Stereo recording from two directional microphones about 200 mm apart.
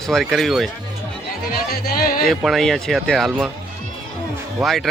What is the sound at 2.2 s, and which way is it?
Speech, centre (ahead or behind).